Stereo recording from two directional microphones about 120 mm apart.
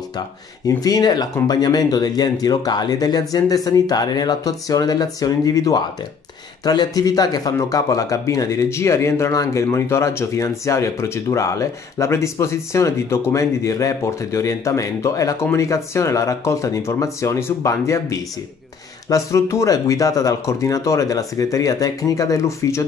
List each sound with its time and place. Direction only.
0.7 s speech: 30° left (ahead or behind)